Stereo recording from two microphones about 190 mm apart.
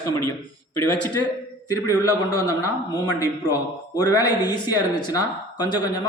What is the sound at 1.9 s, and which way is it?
Speech, 20° left (ahead or behind).